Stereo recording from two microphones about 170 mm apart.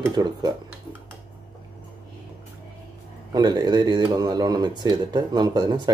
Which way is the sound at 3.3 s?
25° right (ahead or behind).